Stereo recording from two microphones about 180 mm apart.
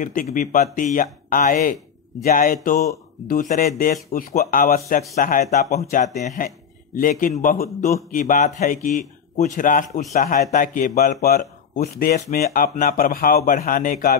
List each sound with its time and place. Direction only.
0.0 s speech: 50° left (ahead or behind)